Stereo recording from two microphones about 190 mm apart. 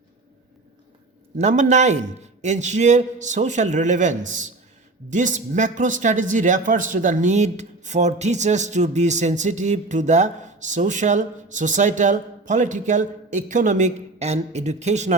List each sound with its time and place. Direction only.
1.4 s a man's voice: 35° right (ahead or behind)